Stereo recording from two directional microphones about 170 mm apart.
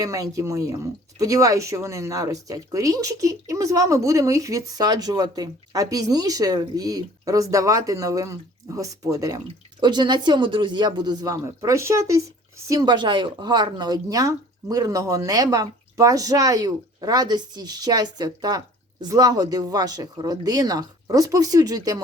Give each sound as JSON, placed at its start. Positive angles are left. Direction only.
{"t": 0.0, "sound": "speech", "side_deg": -20}